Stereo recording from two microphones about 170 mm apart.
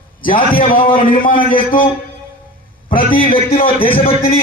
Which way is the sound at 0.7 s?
30° left (ahead or behind).